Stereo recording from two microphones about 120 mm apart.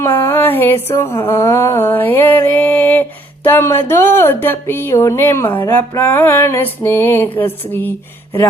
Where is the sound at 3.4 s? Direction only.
20° left (ahead or behind).